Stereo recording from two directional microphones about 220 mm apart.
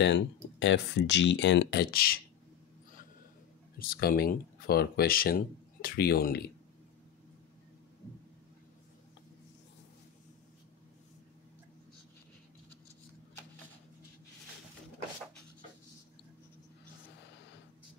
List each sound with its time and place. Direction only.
0.0 s speech: 55° left (ahead or behind)
3.7 s speech: 40° left (ahead or behind)